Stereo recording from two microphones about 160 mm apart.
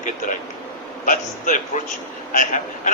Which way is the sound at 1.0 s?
60° left (ahead or behind).